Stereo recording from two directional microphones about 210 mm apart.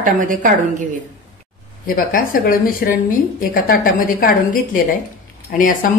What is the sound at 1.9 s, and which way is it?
A woman's voice, 40° left (ahead or behind).